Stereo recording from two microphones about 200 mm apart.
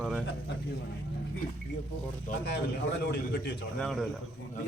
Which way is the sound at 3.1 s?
55° left (ahead or behind).